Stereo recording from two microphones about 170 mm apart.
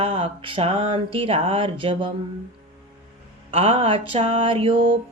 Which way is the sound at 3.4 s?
35° right (ahead or behind).